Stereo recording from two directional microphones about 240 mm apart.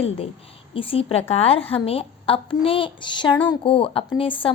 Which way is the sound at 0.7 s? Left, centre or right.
Left.